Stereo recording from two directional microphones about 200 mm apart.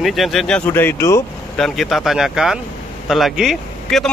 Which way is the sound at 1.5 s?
Centre (ahead or behind).